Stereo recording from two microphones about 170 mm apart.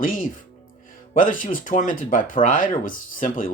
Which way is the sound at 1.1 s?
50° left (ahead or behind).